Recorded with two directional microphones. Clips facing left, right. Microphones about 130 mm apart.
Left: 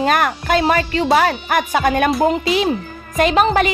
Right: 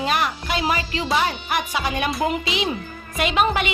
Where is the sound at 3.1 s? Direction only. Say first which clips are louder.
Left 6 dB; 40° left (ahead or behind).